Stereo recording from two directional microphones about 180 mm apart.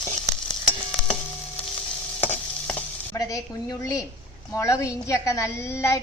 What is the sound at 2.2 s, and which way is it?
Stir, 10° left (ahead or behind).